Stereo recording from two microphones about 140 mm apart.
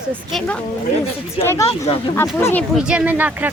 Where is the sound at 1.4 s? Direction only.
20° left (ahead or behind).